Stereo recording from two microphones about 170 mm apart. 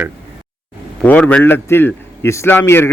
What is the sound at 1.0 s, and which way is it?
A man's voice, 10° left (ahead or behind).